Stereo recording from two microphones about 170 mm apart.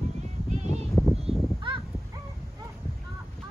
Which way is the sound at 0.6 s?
40° right (ahead or behind).